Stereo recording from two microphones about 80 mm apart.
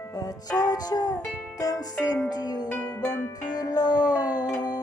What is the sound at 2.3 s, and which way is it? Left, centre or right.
Music, left.